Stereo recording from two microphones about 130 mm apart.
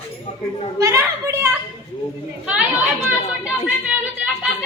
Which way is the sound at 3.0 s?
10° right (ahead or behind).